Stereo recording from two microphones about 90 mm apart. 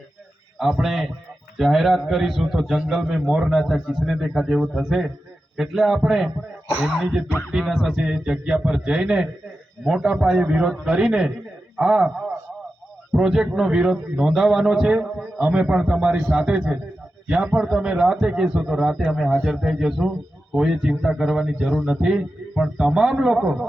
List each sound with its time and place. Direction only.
0.6 s a man's voice: 5° right (ahead or behind)
13.1 s a man's voice: 5° right (ahead or behind)